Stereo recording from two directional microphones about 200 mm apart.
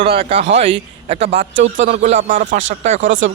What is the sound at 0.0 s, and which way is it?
A man's voice, 30° right (ahead or behind).